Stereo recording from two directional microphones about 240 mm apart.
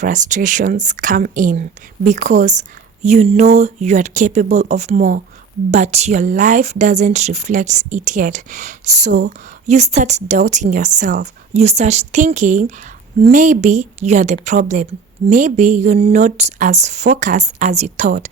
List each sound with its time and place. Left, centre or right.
0.0 s speech: right